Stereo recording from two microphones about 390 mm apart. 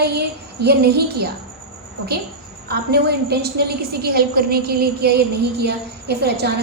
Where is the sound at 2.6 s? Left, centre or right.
Right.